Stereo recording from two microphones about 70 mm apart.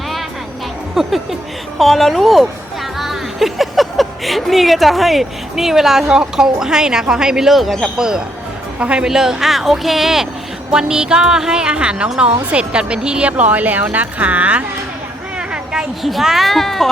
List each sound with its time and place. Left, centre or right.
0.9 s a woman's voice: centre; by 14.6 s right
15.4 s a sound: centre
16.0 s speech: centre